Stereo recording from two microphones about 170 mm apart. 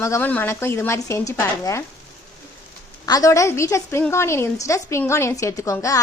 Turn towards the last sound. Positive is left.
turn(degrees=20)  # may be behind; listen again after turning